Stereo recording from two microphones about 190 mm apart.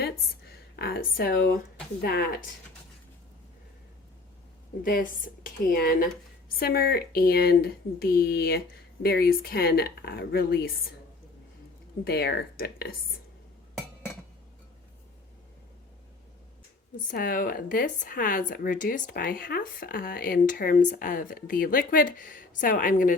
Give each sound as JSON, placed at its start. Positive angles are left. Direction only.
{"t": 0.0, "sound": "speech", "side_deg": 55}
{"t": 4.8, "sound": "speech", "side_deg": 50}
{"t": 12.0, "sound": "speech", "side_deg": 55}
{"t": 17.1, "sound": "speech", "side_deg": 45}